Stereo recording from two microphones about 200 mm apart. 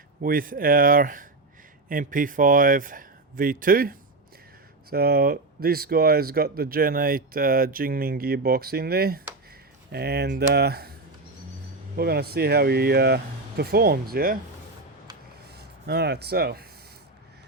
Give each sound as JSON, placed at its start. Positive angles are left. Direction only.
{"t": 0.2, "sound": "speech", "side_deg": -45}
{"t": 11.9, "sound": "speech", "side_deg": -50}
{"t": 15.4, "sound": "speech", "side_deg": -55}